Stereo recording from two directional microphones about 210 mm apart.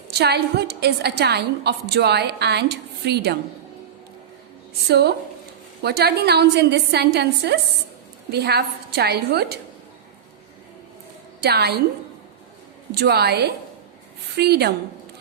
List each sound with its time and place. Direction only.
0.1 s a woman's voice: 50° right (ahead or behind)
4.9 s a woman's voice: 50° right (ahead or behind)
11.3 s a woman's voice: 50° right (ahead or behind)
12.9 s a woman's voice: 50° right (ahead or behind)